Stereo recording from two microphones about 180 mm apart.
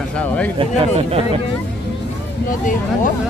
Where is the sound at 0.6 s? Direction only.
35° right (ahead or behind).